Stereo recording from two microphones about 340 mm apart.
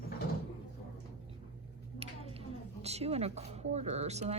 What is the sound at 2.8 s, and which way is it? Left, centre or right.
Speech, centre.